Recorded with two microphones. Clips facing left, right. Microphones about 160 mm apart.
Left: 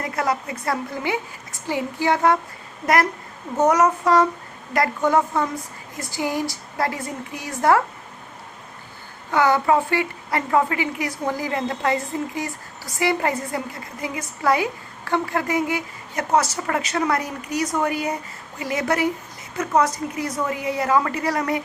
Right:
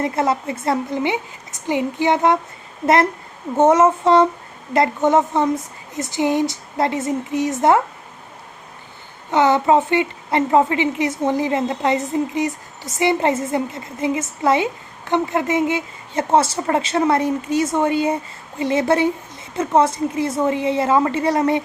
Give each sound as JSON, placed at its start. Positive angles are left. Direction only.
{"t": 0.0, "sound": "a woman's voice", "side_deg": -25}
{"t": 9.3, "sound": "a woman's voice", "side_deg": -20}